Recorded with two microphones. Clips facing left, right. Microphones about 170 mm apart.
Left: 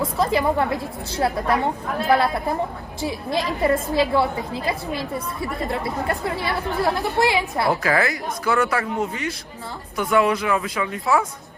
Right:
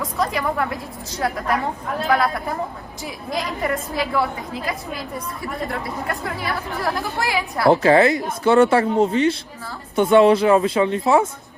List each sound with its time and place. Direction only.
0.0 s a woman's voice: 30° left (ahead or behind)
6.4 s a woman's voice: 25° left (ahead or behind)
7.7 s speech: 25° right (ahead or behind)